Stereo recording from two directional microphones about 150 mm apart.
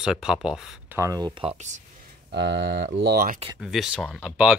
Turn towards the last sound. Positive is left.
turn(degrees=-5)  # may be behind; listen again after turning